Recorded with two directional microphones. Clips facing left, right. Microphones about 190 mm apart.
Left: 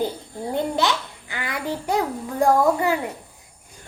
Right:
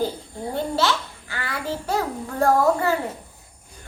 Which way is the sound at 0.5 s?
15° left (ahead or behind).